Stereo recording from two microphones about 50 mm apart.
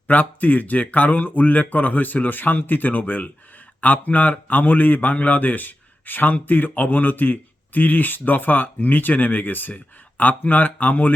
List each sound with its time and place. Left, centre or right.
0.1 s speech: left